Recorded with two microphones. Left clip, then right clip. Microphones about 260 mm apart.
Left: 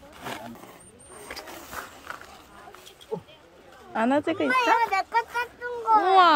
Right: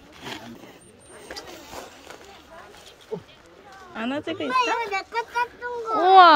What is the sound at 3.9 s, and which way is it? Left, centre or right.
A child's voice, centre.